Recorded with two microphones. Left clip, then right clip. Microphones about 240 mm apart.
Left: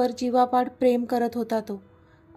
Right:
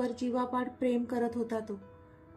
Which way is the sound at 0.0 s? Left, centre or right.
Left.